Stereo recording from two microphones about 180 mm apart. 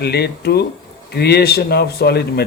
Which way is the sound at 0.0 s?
65° left (ahead or behind).